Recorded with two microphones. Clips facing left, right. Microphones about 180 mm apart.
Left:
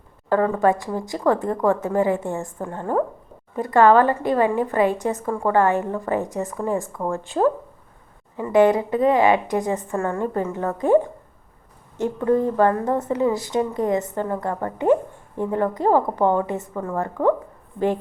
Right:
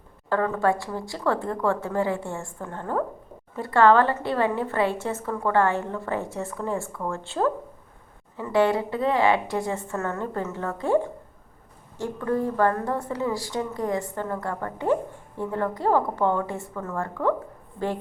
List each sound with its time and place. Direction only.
0.3 s a woman's voice: 20° left (ahead or behind)